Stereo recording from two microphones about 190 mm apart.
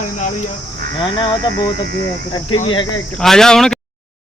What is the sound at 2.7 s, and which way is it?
Speech, 20° left (ahead or behind).